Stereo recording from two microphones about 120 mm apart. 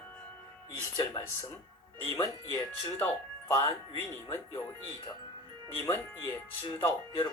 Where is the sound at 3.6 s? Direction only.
25° left (ahead or behind).